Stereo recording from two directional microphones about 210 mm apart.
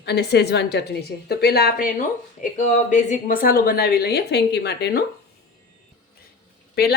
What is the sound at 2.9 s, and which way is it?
Speech, 40° left (ahead or behind).